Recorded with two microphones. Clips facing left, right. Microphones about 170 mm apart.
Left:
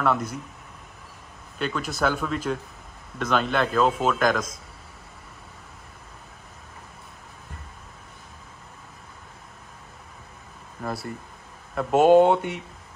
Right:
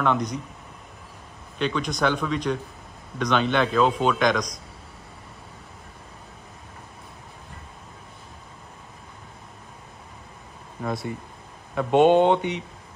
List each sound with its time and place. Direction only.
0.0 s a man's voice: 5° left (ahead or behind)
1.6 s a man's voice: 5° left (ahead or behind)
10.8 s a man's voice: centre (ahead or behind)